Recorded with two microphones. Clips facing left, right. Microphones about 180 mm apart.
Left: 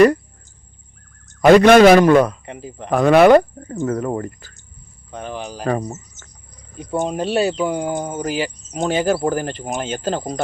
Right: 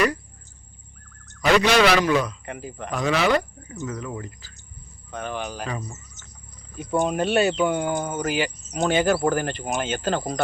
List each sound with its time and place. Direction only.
1.4 s speech: 50° left (ahead or behind)
2.5 s speech: 30° left (ahead or behind)
2.9 s speech: 55° left (ahead or behind)
5.1 s speech: 35° left (ahead or behind)
5.6 s speech: 50° left (ahead or behind)
6.9 s speech: 30° left (ahead or behind)